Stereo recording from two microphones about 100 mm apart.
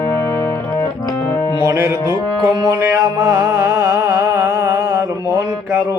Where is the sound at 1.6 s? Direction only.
30° right (ahead or behind).